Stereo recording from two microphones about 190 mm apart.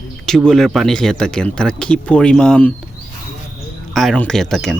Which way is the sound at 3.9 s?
5° left (ahead or behind).